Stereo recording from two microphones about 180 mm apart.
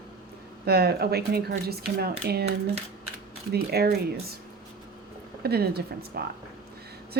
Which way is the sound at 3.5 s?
60° right (ahead or behind).